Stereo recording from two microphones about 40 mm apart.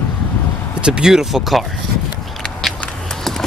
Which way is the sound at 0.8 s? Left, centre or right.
Right.